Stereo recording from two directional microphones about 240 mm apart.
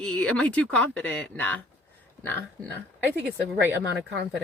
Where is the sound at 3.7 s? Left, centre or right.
Right.